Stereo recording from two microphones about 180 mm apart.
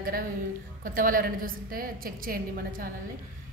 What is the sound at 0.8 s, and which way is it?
A woman's voice, 50° right (ahead or behind).